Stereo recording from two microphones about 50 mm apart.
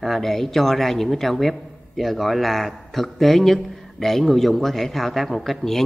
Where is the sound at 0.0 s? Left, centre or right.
Centre.